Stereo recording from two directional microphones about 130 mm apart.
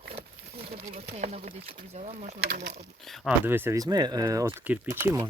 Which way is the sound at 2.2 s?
80° right.